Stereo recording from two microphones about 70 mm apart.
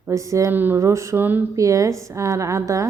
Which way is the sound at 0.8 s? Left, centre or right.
Right.